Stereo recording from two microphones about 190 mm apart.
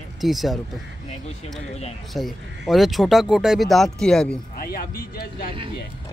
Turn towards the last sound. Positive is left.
turn(degrees=50)  # may be behind; listen again after turning